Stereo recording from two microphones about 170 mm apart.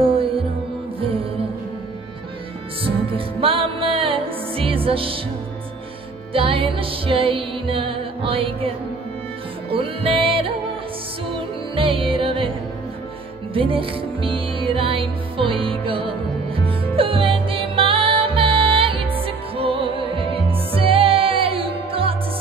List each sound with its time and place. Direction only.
0.0 s music: 30° right (ahead or behind)
2.8 s music: 30° right (ahead or behind)
6.3 s music: 30° right (ahead or behind)